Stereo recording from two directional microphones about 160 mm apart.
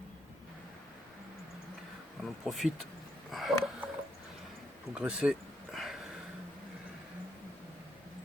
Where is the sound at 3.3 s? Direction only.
Centre (ahead or behind).